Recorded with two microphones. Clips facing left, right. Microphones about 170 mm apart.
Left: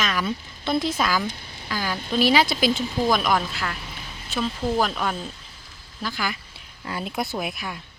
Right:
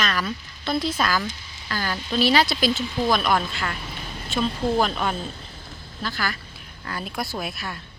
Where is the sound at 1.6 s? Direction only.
10° left (ahead or behind).